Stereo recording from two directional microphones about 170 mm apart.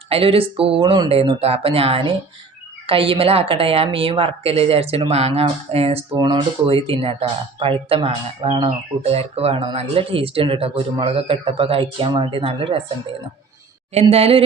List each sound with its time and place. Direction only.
0.1 s a woman's voice: 35° right (ahead or behind)
13.9 s a woman's voice: 35° right (ahead or behind)